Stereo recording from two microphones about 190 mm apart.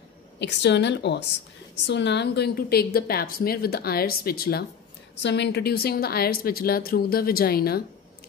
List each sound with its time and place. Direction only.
0.4 s a woman's voice: 65° left (ahead or behind)
5.1 s a woman's voice: 65° left (ahead or behind)